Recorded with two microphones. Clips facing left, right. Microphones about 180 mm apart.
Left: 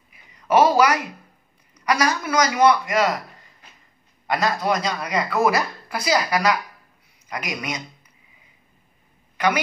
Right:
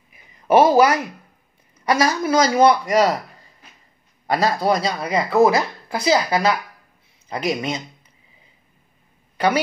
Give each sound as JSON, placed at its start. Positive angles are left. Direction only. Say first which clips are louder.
{"t": 0.3, "sound": "a sound", "louder": "right 3 dB", "side_deg": -25}
{"t": 1.9, "sound": "speech", "louder": "right 3 dB", "side_deg": -25}
{"t": 4.3, "sound": "a woman's voice", "louder": "right 3 dB", "side_deg": -35}